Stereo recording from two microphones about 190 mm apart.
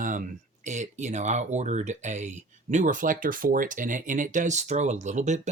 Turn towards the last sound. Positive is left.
turn(degrees=-40)  # may be behind; listen again after turning